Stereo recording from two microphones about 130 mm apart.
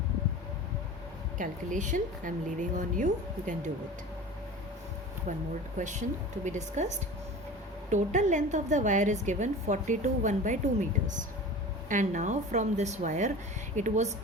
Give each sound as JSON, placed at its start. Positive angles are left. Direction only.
{"t": 1.4, "sound": "a woman's voice", "side_deg": -75}
{"t": 5.7, "sound": "a woman's voice", "side_deg": -70}